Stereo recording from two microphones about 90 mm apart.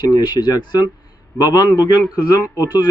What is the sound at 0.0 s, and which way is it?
Speech, 55° left (ahead or behind).